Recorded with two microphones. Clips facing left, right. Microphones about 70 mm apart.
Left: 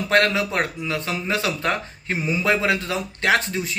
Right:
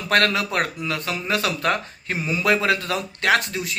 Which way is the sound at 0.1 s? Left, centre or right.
Left.